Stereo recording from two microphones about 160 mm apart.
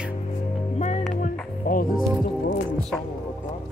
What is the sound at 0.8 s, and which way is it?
Music, 45° left (ahead or behind).